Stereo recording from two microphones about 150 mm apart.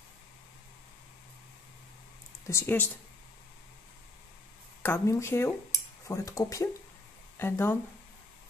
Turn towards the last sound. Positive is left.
turn(degrees=15)  # may be behind; listen again after turning